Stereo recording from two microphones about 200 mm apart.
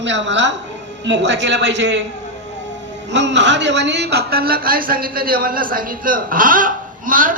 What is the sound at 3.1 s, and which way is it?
A man's voice, 60° right (ahead or behind).